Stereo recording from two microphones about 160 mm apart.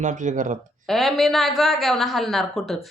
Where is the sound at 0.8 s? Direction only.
Centre (ahead or behind).